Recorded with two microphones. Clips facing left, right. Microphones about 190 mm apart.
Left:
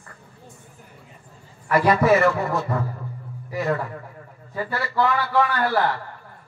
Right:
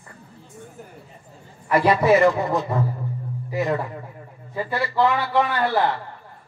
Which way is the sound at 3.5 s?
20° right (ahead or behind).